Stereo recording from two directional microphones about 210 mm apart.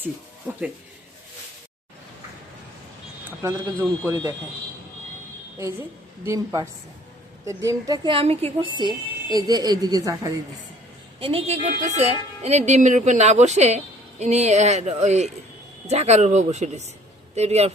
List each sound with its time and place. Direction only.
0.0 s speech: 10° right (ahead or behind)
3.4 s speech: 10° right (ahead or behind)
6.2 s speech: 15° right (ahead or behind)
11.2 s speech: 25° right (ahead or behind)